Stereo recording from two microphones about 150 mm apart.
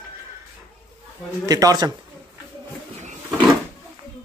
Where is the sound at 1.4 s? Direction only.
25° right (ahead or behind).